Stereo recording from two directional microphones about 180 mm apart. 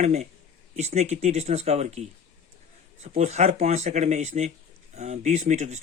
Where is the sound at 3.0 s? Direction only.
35° right (ahead or behind).